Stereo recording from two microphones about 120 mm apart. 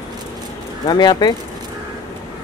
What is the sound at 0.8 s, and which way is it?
Speech, 35° left (ahead or behind).